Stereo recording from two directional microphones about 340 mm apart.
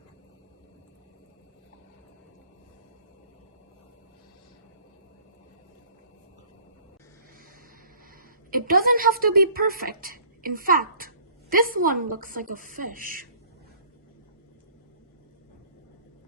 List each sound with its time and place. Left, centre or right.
8.1 s a woman's voice: right